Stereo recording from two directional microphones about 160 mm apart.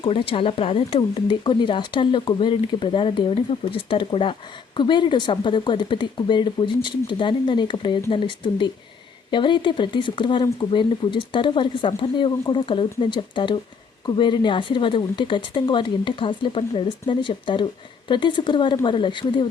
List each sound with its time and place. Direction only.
0.0 s speech: 35° left (ahead or behind)